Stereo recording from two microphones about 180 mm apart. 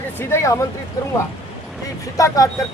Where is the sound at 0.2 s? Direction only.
15° left (ahead or behind).